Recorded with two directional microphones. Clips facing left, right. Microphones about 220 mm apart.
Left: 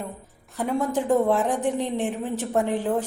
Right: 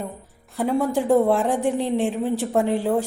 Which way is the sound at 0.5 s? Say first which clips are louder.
Right 3 dB; 10° right (ahead or behind).